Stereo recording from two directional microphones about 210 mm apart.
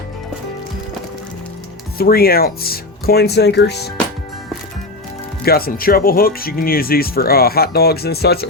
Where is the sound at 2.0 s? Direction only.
45° left (ahead or behind).